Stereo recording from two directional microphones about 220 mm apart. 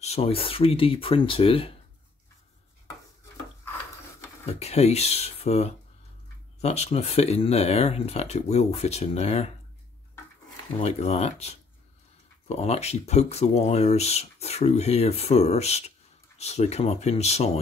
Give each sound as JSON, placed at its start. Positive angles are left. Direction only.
{"t": 0.0, "sound": "speech", "side_deg": 30}
{"t": 4.5, "sound": "speech", "side_deg": 30}
{"t": 10.8, "sound": "speech", "side_deg": 30}